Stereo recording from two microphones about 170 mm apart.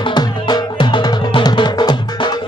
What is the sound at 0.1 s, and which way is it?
Music, 25° left (ahead or behind).